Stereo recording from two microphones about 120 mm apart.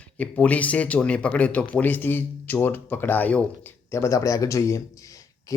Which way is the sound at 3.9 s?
25° left (ahead or behind).